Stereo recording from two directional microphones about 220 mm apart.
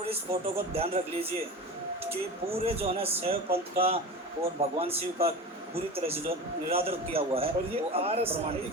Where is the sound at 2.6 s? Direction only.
25° right (ahead or behind).